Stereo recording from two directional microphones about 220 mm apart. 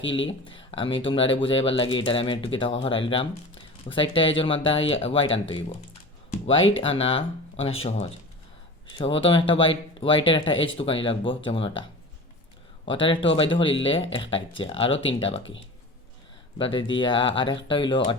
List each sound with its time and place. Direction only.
0.1 s speech: 25° left (ahead or behind)
16.6 s speech: 25° left (ahead or behind)